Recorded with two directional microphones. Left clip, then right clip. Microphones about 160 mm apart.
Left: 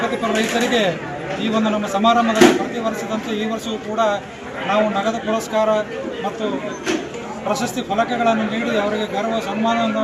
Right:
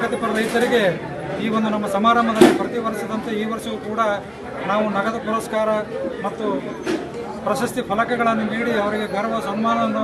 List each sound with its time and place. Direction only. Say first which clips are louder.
0.3 s speech: right 1 dB; 5° right (ahead or behind)
7.5 s speech: left 1 dB; 10° right (ahead or behind)